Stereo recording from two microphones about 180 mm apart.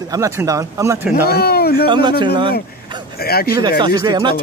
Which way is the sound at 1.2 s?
60° left (ahead or behind).